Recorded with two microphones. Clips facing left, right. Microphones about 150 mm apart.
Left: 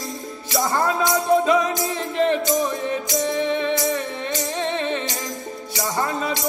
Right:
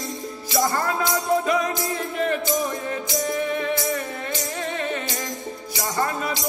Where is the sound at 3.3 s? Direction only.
25° left (ahead or behind).